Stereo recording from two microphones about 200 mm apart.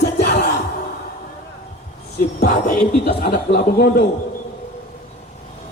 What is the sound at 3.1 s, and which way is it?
Chuckle, 50° left (ahead or behind).